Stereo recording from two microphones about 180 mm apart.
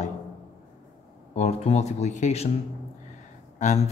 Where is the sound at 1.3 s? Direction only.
35° left (ahead or behind).